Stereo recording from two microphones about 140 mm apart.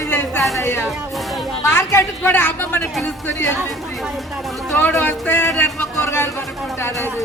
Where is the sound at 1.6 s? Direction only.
20° left (ahead or behind).